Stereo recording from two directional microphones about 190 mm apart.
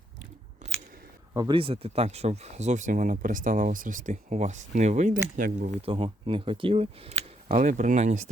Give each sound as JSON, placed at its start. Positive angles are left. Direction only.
{"t": 0.6, "sound": "a sound", "side_deg": -40}
{"t": 1.3, "sound": "speech", "side_deg": -20}
{"t": 5.8, "sound": "speech", "side_deg": -30}